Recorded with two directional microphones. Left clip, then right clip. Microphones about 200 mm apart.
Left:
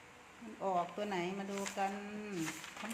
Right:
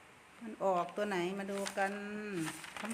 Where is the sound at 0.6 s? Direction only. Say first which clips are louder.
Right 3 dB; 40° right (ahead or behind).